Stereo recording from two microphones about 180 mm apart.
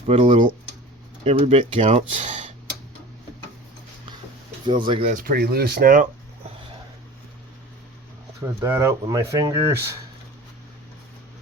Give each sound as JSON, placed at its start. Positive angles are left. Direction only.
{"t": 0.1, "sound": "speech", "side_deg": -35}
{"t": 4.6, "sound": "speech", "side_deg": -25}
{"t": 5.1, "sound": "speech", "side_deg": -55}
{"t": 8.6, "sound": "speech", "side_deg": -15}